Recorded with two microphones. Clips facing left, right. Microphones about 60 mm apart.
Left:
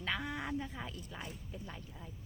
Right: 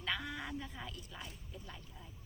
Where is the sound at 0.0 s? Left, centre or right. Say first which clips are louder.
Left 2 dB; left.